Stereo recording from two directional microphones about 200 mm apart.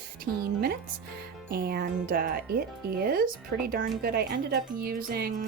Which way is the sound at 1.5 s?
50° right (ahead or behind).